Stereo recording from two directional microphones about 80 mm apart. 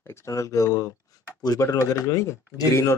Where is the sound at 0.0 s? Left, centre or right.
Left.